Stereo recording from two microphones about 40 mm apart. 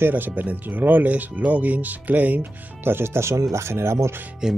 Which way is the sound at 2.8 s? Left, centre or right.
Right.